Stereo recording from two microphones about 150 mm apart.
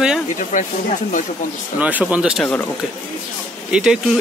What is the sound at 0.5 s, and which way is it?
Speech, 55° left (ahead or behind).